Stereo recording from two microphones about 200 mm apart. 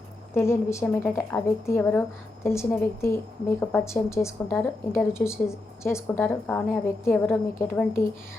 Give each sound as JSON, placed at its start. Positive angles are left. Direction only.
{"t": 0.3, "sound": "a woman's voice", "side_deg": 15}